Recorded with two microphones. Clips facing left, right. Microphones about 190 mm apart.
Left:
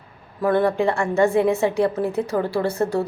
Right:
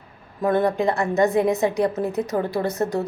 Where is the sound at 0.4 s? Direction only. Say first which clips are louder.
Left 1 dB; 20° right (ahead or behind).